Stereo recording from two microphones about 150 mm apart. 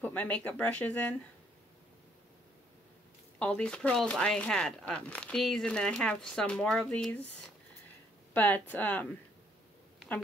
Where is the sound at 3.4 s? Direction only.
5° left (ahead or behind).